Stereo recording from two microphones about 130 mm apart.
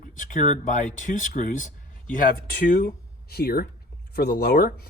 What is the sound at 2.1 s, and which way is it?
Speech, 90° left.